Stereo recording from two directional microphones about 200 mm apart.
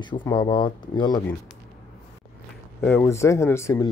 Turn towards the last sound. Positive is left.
turn(degrees=15)  # may be behind; listen again after turning